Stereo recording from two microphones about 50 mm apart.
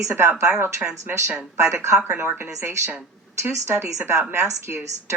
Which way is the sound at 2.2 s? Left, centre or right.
Right.